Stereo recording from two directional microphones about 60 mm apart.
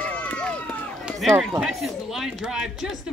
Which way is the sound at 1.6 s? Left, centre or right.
Centre.